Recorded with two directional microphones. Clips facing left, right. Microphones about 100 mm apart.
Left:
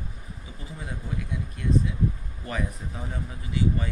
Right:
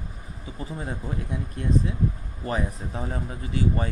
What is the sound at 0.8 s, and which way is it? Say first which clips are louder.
Speech: right 1 dB; 35° right (ahead or behind).